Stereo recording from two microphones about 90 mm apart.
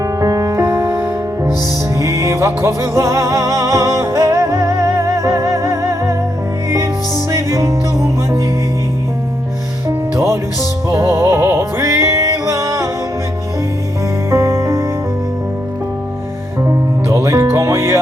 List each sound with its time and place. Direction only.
0.0 s music: 40° right (ahead or behind)
7.3 s music: 35° right (ahead or behind)
10.2 s music: 35° right (ahead or behind)
14.3 s music: 30° right (ahead or behind)
16.6 s music: 35° right (ahead or behind)